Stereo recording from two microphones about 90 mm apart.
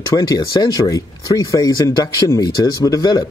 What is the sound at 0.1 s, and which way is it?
Speech, 35° left (ahead or behind).